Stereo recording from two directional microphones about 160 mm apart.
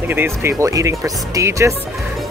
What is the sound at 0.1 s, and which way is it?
Speech, 15° right (ahead or behind).